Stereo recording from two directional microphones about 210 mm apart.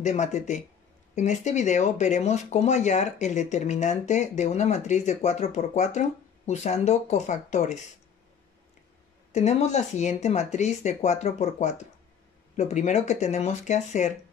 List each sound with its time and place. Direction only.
0.0 s speech: 35° left (ahead or behind)
9.3 s speech: 30° left (ahead or behind)